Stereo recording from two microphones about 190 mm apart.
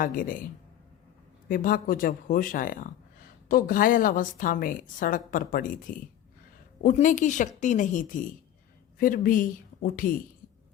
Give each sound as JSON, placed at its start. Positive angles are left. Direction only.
{"t": 0.0, "sound": "a woman's voice", "side_deg": 45}
{"t": 1.5, "sound": "a woman's voice", "side_deg": 45}